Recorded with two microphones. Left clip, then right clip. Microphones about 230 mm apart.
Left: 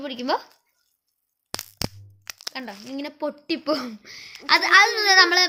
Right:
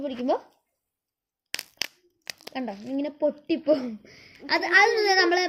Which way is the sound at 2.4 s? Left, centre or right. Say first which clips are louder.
Right 1 dB; left.